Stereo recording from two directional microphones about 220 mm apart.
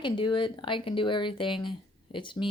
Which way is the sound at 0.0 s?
20° left (ahead or behind).